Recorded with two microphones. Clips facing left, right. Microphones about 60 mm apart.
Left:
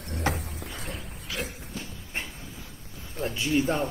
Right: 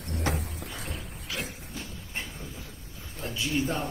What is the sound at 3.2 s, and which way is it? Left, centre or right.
Speech, left.